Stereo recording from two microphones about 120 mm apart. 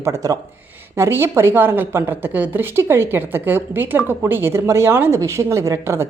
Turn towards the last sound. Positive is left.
turn(degrees=-20)  # may be behind; listen again after turning